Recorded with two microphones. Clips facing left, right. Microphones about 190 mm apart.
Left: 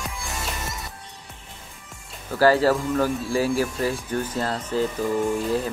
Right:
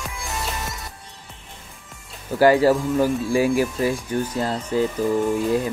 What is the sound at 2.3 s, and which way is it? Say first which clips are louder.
Speech: right 3 dB; 15° right (ahead or behind).